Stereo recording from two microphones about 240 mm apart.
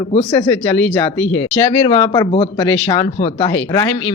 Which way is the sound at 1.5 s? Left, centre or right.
Left.